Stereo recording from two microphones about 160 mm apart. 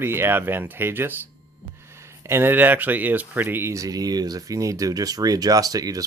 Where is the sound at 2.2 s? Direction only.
15° right (ahead or behind).